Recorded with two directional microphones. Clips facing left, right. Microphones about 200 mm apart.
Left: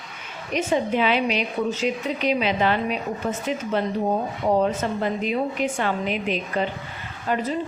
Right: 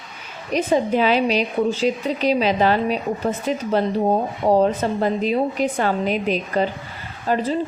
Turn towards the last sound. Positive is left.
turn(degrees=-35)  # may be behind; listen again after turning